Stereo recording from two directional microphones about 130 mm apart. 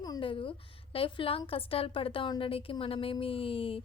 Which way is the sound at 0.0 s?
35° left (ahead or behind).